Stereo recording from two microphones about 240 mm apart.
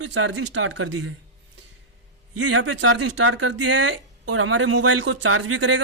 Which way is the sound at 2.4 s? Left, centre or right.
Right.